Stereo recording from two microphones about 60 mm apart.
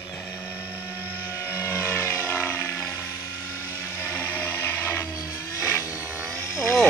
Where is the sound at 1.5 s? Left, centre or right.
Left.